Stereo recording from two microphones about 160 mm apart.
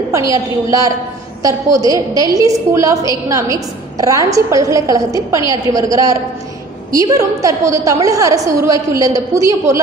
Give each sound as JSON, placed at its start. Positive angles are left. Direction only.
{"t": 0.1, "sound": "a woman's voice", "side_deg": -20}